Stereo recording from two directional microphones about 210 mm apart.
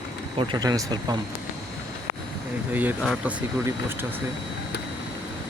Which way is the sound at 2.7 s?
5° right (ahead or behind).